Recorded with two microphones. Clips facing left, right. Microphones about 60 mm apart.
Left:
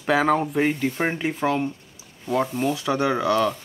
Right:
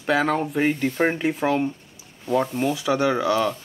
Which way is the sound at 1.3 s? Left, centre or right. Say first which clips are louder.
Right 1 dB; centre.